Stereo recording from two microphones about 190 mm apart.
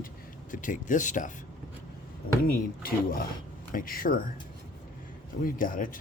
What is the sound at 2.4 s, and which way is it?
Speech, 50° left (ahead or behind).